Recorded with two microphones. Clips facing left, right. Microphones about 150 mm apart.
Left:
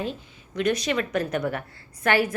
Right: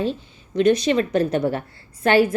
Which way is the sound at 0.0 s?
30° right (ahead or behind).